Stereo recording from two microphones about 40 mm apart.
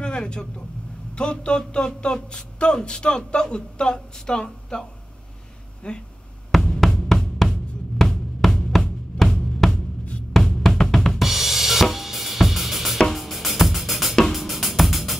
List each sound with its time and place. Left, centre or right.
0.0 s vehicle: left
1.1 s speech: left
5.8 s speech: left
6.5 s drum: centre
14.3 s music: centre